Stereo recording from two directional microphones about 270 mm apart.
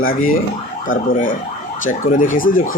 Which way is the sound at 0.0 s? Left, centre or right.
Left.